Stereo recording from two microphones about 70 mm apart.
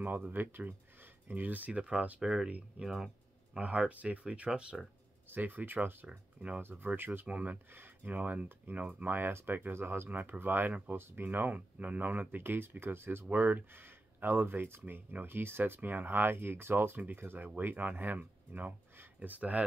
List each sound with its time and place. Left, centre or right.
0.0 s speech: right
1.7 s speech: centre
3.5 s speech: centre
6.6 s speech: right